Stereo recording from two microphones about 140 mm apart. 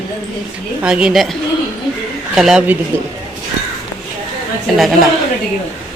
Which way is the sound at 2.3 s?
5° right (ahead or behind).